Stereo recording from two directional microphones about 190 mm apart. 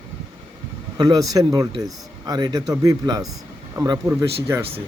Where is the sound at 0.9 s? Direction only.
20° right (ahead or behind).